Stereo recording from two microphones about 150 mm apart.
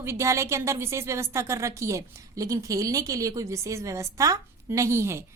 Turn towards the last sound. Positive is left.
turn(degrees=-15)  # may be behind; listen again after turning